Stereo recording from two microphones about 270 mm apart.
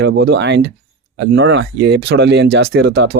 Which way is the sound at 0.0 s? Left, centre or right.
Right.